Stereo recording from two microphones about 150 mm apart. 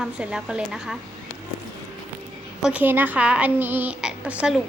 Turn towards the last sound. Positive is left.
turn(degrees=-5)  # may be behind; listen again after turning